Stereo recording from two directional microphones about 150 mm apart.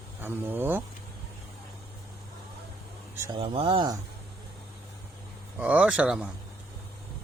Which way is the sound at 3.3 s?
35° right (ahead or behind).